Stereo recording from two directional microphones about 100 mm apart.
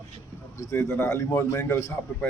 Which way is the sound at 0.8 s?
20° left (ahead or behind).